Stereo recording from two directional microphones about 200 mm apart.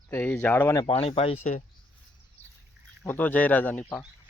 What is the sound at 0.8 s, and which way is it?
Speech, 30° left (ahead or behind).